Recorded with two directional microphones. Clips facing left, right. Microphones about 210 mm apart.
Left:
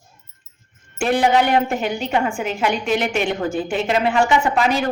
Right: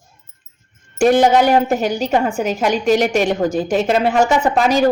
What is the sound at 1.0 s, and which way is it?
A woman's voice, 40° right (ahead or behind).